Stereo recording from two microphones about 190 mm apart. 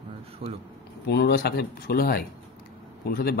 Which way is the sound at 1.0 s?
60° left (ahead or behind).